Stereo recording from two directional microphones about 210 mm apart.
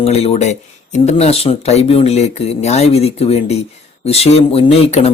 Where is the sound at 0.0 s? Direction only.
30° left (ahead or behind).